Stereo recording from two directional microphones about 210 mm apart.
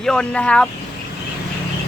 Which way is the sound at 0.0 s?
5° left (ahead or behind).